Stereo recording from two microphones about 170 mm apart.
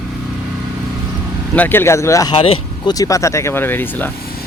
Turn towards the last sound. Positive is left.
turn(degrees=10)  # may be behind; listen again after turning